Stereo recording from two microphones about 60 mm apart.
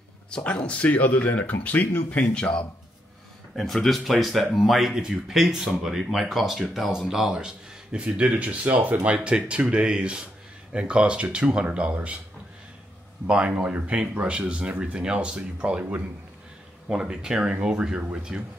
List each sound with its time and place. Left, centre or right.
0.3 s speech: left
3.5 s speech: centre; by 12.2 s right
13.3 s speech: right
16.9 s speech: centre